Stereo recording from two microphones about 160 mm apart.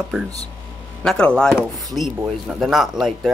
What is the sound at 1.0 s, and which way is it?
Speech, 5° left (ahead or behind).